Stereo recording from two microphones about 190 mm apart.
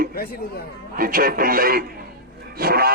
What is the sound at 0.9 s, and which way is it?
A man's voice, 50° right (ahead or behind).